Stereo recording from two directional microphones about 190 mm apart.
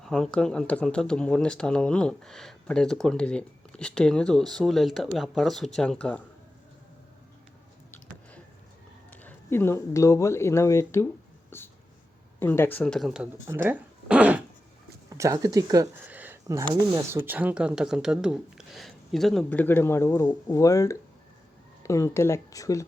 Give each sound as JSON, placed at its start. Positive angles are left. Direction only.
{"t": 0.0, "sound": "speech", "side_deg": 5}
{"t": 9.0, "sound": "speech", "side_deg": 10}
{"t": 15.2, "sound": "speech", "side_deg": -15}